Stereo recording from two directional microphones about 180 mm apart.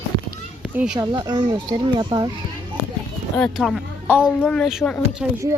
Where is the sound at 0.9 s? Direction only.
25° right (ahead or behind).